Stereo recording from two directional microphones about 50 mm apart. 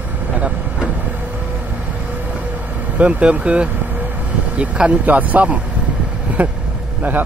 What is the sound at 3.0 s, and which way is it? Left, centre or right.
Speech, right.